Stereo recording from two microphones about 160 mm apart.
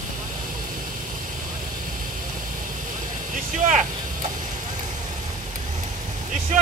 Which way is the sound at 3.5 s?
50° right (ahead or behind).